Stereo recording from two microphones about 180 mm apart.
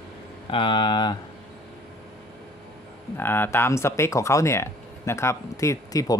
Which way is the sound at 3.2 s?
10° left (ahead or behind).